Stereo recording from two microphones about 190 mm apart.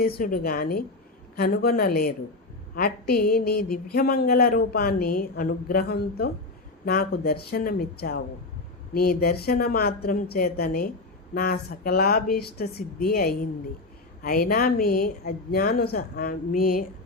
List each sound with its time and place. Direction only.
0.2 s a woman's voice: 50° left (ahead or behind)